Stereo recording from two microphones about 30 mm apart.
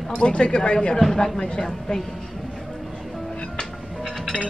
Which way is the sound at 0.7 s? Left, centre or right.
Left.